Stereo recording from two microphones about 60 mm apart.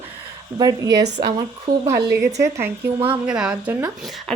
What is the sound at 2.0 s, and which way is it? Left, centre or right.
Speech, right.